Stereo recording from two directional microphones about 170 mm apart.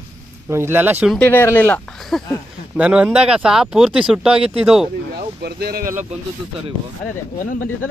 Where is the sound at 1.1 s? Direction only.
10° left (ahead or behind).